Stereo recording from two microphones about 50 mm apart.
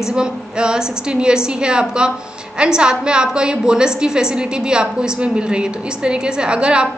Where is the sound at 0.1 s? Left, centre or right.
Centre.